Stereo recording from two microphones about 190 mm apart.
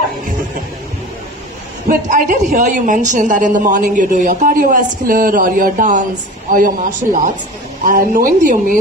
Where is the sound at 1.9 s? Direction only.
45° right (ahead or behind).